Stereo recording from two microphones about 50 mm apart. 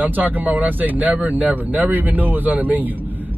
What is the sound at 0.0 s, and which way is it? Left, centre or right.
Speech, right.